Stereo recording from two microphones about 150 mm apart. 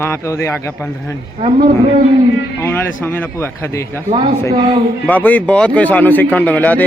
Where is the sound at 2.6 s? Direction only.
15° left (ahead or behind).